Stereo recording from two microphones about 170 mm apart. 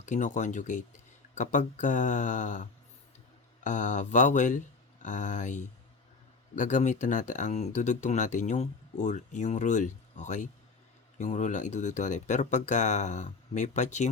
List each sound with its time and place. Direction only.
0.0 s speech: 45° left (ahead or behind)